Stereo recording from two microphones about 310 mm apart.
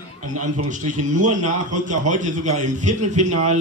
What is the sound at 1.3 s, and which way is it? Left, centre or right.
A man's voice, right.